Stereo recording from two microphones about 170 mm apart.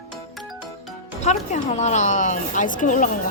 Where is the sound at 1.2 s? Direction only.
40° left (ahead or behind).